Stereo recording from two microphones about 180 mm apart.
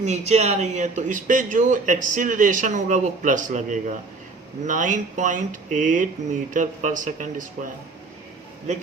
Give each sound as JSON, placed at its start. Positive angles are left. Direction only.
{"t": 0.0, "sound": "speech", "side_deg": -40}